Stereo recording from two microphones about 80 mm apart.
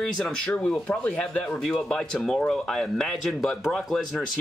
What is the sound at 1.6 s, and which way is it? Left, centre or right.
Speech, centre.